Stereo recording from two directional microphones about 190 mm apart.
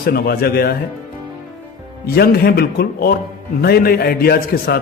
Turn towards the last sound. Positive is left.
turn(degrees=55)  # may be behind; listen again after turning